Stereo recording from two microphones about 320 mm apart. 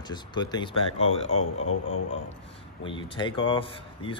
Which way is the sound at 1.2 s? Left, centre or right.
Left.